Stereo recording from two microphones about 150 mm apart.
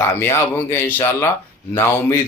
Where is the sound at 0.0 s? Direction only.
15° left (ahead or behind).